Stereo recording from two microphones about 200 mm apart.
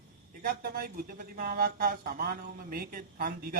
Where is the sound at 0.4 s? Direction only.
45° right (ahead or behind).